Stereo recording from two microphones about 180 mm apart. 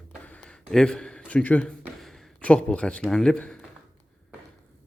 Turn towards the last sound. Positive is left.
turn(degrees=5)  # may be behind; listen again after turning